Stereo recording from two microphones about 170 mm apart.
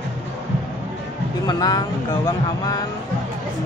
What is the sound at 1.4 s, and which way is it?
Speech, 25° left (ahead or behind).